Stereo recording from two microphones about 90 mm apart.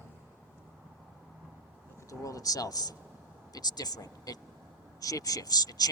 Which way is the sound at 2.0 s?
40° left (ahead or behind).